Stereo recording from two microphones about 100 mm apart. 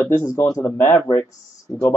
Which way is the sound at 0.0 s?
25° left (ahead or behind).